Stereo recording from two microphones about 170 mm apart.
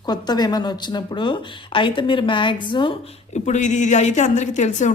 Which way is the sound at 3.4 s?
45° left (ahead or behind).